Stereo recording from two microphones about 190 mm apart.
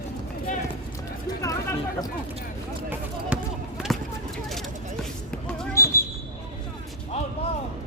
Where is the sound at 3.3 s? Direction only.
5° right (ahead or behind).